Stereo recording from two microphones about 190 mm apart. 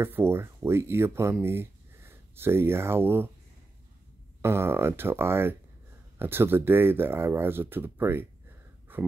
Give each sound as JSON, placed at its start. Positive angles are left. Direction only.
{"t": 0.0, "sound": "speech", "side_deg": -10}
{"t": 4.4, "sound": "speech", "side_deg": -15}